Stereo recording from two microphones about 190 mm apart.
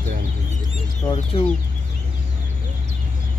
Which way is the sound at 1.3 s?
30° left (ahead or behind).